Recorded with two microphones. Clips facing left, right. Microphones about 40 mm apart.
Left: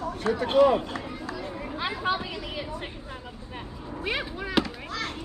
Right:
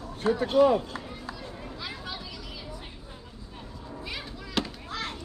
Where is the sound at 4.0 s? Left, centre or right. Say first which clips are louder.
Left 9 dB; left.